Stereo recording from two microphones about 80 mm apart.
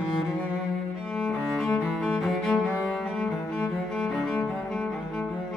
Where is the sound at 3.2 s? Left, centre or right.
Centre.